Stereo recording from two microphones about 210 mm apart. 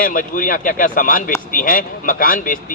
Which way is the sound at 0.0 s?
40° left (ahead or behind).